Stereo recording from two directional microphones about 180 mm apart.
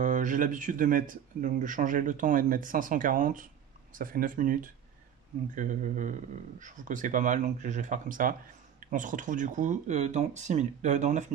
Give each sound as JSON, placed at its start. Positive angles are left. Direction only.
{"t": 0.0, "sound": "speech", "side_deg": -45}